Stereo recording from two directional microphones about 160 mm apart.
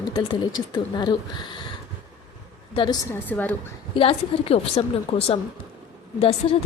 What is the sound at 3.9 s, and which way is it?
A woman's voice, 35° left (ahead or behind).